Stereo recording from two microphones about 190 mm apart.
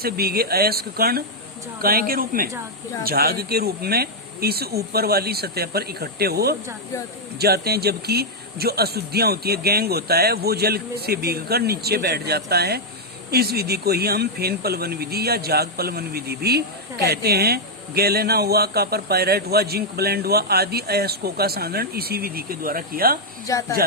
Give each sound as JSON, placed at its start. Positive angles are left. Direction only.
{"t": 0.0, "sound": "speech", "side_deg": -55}
{"t": 23.5, "sound": "speech", "side_deg": 15}